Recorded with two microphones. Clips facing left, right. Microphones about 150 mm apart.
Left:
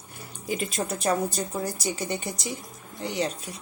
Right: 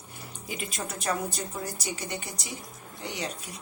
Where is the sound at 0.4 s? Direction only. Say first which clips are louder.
Left 7 dB; 30° left (ahead or behind).